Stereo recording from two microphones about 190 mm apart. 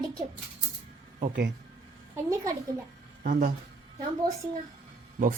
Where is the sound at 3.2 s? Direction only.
45° right (ahead or behind).